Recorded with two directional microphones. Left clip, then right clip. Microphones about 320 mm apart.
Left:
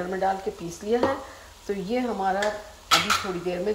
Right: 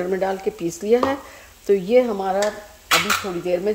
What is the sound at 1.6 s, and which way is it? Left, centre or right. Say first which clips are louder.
Speech: right 11 dB; right.